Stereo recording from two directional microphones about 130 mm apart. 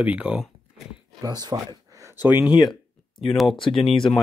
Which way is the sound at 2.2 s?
10° right (ahead or behind).